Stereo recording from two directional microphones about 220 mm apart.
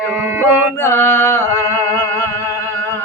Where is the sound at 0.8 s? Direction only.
10° left (ahead or behind).